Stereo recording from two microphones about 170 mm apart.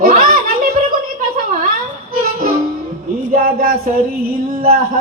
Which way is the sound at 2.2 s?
55° right (ahead or behind).